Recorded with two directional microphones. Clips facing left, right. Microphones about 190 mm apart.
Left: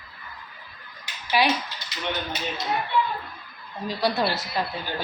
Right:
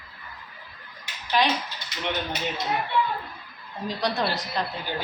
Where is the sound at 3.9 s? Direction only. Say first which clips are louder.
Left 2 dB; 5° left (ahead or behind).